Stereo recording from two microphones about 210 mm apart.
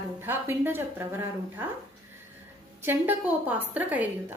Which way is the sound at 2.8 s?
10° right (ahead or behind).